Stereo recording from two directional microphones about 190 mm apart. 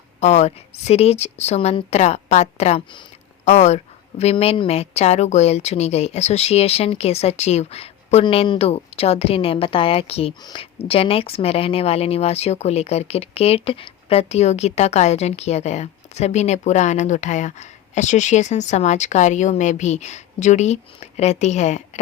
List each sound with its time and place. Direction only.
0.2 s speech: 35° left (ahead or behind)